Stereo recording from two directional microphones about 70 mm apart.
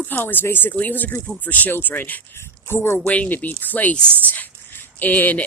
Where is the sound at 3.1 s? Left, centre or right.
Left.